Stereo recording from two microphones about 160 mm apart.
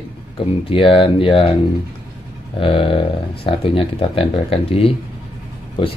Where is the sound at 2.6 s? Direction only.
30° left (ahead or behind).